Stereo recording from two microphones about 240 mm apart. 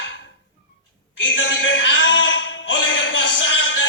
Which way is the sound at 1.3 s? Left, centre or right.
Left.